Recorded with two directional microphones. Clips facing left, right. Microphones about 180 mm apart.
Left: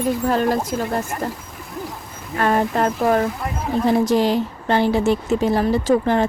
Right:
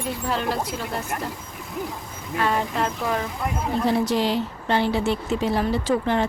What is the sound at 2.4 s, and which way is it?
Speech, 50° left (ahead or behind).